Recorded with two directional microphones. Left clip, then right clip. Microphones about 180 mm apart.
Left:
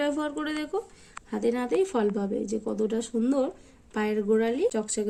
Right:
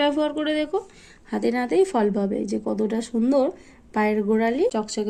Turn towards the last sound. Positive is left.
turn(degrees=0)  # may be behind; listen again after turning